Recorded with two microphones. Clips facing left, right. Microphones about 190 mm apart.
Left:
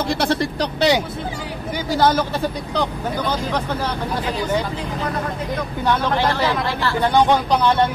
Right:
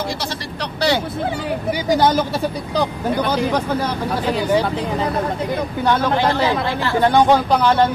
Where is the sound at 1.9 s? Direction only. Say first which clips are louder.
Right 1 dB; 15° right (ahead or behind).